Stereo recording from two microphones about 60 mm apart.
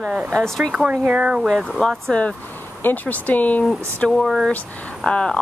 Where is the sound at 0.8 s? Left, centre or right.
Right.